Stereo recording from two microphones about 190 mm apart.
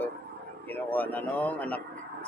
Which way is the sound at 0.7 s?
10° left (ahead or behind).